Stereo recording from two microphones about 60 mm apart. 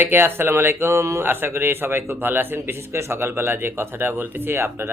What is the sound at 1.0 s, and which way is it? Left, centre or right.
Speech, right.